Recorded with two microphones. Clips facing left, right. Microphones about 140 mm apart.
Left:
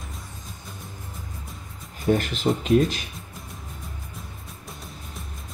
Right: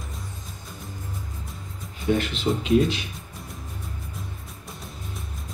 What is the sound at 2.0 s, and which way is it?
Speech, 45° left (ahead or behind).